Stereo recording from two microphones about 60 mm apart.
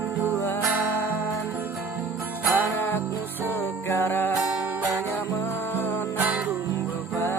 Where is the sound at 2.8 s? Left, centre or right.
Left.